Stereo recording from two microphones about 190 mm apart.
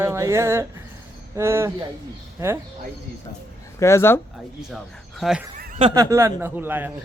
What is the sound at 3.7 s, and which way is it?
Speech, 15° left (ahead or behind).